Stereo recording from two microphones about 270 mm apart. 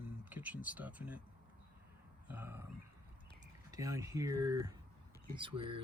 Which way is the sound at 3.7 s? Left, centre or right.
Centre.